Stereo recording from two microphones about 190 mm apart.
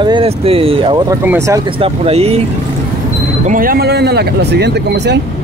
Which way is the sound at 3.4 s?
45° right (ahead or behind).